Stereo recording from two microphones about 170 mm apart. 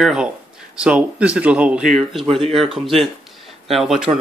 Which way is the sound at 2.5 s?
Centre (ahead or behind).